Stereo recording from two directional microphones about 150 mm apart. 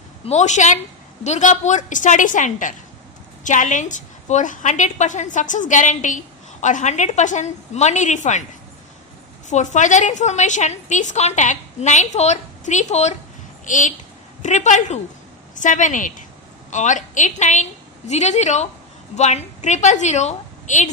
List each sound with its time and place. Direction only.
0.3 s a woman's voice: 50° left (ahead or behind)
9.5 s a woman's voice: 55° left (ahead or behind)